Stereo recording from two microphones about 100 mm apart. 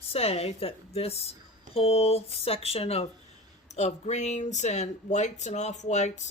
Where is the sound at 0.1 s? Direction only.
90° left.